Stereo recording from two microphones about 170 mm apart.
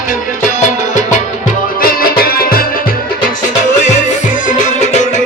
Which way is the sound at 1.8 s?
60° left (ahead or behind).